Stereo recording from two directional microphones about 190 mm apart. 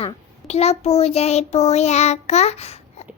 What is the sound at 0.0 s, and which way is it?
A child's voice, 35° left (ahead or behind).